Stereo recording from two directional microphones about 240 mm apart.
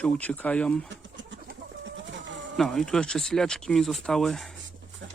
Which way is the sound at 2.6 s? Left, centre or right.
Centre.